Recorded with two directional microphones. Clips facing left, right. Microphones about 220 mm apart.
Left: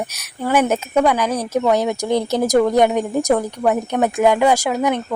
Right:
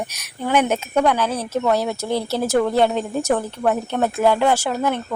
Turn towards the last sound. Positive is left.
turn(degrees=15)  # may be behind; listen again after turning